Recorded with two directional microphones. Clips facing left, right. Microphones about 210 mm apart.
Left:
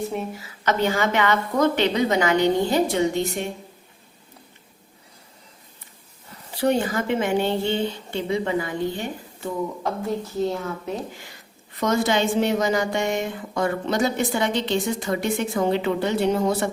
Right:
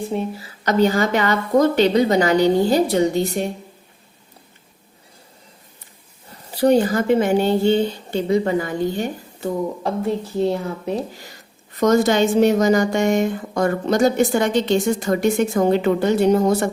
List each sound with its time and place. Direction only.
0.1 s a woman's voice: 35° right (ahead or behind)
6.6 s a woman's voice: 40° right (ahead or behind)
10.5 s a woman's voice: 35° right (ahead or behind)